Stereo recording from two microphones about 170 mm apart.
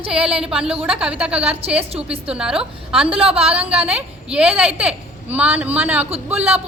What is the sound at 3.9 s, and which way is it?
A child's voice, 5° right (ahead or behind).